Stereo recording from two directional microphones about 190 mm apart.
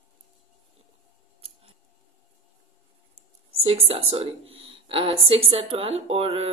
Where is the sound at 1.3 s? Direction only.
30° right (ahead or behind).